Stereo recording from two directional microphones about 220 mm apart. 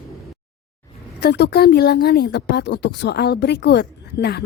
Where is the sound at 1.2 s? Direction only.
50° left (ahead or behind).